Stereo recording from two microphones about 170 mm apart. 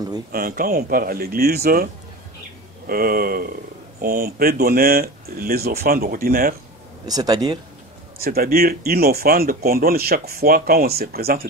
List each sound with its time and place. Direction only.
0.3 s speech: 60° right (ahead or behind)
2.9 s speech: 60° right (ahead or behind)
7.1 s speech: 20° right (ahead or behind)
8.2 s speech: 65° right (ahead or behind)